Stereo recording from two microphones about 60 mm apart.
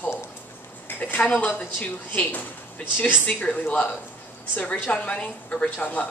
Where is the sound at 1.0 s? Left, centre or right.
Left.